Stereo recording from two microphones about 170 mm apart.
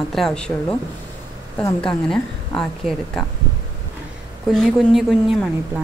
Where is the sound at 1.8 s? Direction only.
5° left (ahead or behind).